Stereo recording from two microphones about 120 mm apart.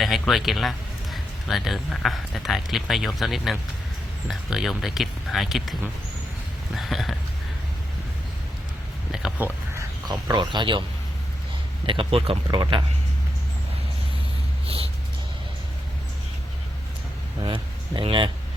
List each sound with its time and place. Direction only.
0.0 s speech: centre (ahead or behind)
6.7 s speech: centre (ahead or behind)
9.4 s speech: 15° right (ahead or behind)
10.1 s speech: 40° right (ahead or behind)
11.9 s speech: 50° right (ahead or behind)
17.4 s speech: 45° right (ahead or behind)